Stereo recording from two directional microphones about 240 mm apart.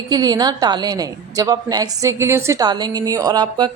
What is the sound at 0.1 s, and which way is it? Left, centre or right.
A woman's voice, centre.